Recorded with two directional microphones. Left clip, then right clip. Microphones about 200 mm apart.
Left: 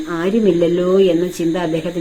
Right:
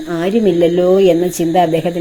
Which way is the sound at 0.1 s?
20° right (ahead or behind).